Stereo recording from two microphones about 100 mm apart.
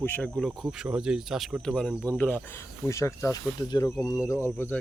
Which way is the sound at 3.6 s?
45° left (ahead or behind).